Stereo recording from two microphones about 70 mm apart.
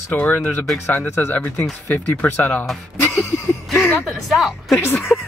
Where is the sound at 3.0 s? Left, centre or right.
Left.